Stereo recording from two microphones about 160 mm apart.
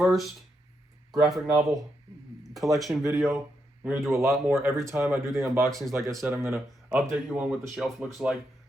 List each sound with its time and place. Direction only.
0.0 s speech: centre (ahead or behind)
4.1 s speech: 20° right (ahead or behind)
7.1 s speech: 5° right (ahead or behind)